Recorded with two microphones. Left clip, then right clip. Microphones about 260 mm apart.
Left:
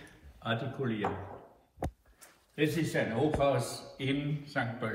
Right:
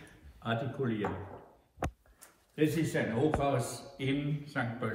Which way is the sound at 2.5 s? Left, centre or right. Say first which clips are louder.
Even; centre.